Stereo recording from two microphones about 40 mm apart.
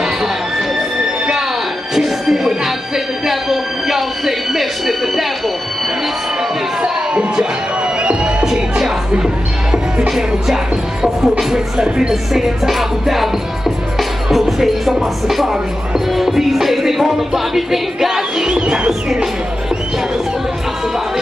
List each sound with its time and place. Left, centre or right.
2.0 s music: centre
3.3 s a sound: centre
6.8 s speech: right
8.0 s crowd: right
8.5 s music: centre
18.5 s speech: centre